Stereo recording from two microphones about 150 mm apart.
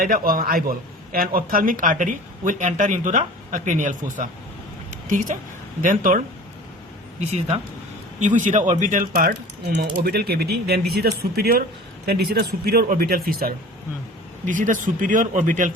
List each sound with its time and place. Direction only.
0.0 s a man's voice: 70° right (ahead or behind)
7.3 s speech: 40° right (ahead or behind)
8.2 s speech: 55° right (ahead or behind); by 13.5 s 80° right
14.4 s a man's voice: 60° right (ahead or behind)